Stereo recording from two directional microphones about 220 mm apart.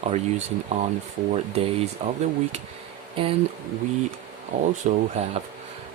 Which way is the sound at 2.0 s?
30° right (ahead or behind).